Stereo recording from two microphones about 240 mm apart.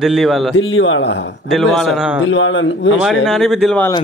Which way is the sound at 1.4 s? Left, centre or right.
Centre.